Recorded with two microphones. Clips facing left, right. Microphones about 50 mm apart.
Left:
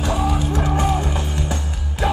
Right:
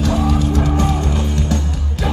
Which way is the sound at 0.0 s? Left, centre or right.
Centre.